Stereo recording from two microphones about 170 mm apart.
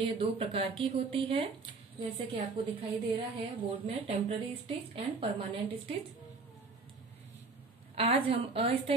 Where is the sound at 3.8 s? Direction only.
35° right (ahead or behind).